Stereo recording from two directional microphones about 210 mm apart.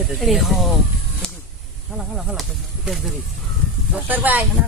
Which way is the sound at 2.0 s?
5° right (ahead or behind).